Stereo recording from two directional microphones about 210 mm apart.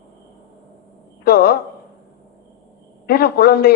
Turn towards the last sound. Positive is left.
turn(degrees=50)  # may be behind; listen again after turning